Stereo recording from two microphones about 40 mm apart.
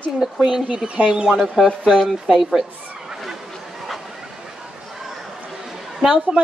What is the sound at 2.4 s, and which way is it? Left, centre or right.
Speech, centre.